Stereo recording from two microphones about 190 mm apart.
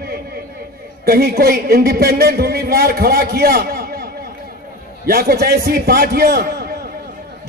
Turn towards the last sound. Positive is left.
turn(degrees=-55)  # may be behind; listen again after turning